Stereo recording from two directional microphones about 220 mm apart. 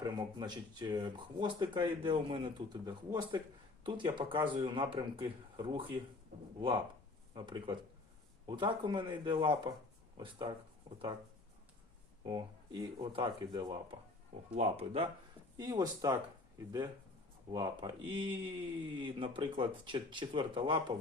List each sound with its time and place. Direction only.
0.0 s speech: 20° right (ahead or behind)
7.3 s speech: 20° right (ahead or behind)
12.2 s speech: 20° right (ahead or behind)
15.5 s speech: 15° right (ahead or behind)
17.5 s speech: 20° right (ahead or behind)